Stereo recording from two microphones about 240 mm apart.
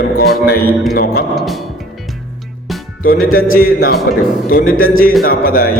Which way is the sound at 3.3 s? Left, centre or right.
Left.